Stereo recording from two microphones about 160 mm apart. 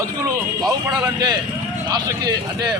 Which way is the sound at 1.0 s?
25° right (ahead or behind).